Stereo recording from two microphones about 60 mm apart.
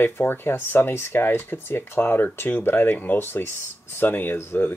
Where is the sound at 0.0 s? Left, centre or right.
Left.